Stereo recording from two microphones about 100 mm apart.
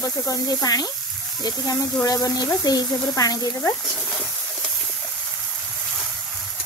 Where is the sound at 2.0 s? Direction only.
35° left (ahead or behind).